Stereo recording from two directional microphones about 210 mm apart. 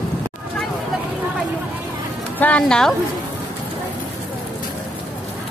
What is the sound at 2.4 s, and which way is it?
Speech, 5° left (ahead or behind).